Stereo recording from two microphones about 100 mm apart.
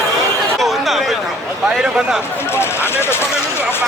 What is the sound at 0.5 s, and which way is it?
Chatter, centre (ahead or behind).